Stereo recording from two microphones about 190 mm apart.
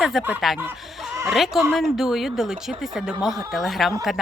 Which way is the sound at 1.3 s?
Centre (ahead or behind).